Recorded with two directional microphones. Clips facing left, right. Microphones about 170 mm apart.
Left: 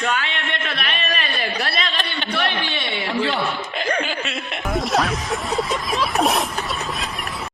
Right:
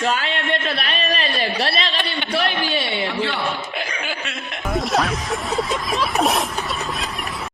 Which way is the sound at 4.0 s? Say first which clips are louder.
Left 3 dB; 5° right (ahead or behind).